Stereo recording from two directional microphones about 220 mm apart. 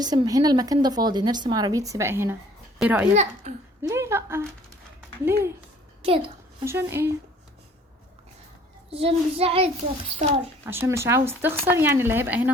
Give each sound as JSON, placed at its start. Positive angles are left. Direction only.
{"t": 0.0, "sound": "a woman's voice", "side_deg": -20}
{"t": 6.0, "sound": "a child's voice", "side_deg": -25}
{"t": 6.7, "sound": "a woman's voice", "side_deg": -10}
{"t": 8.9, "sound": "child singing", "side_deg": -25}
{"t": 10.7, "sound": "a woman's voice", "side_deg": -10}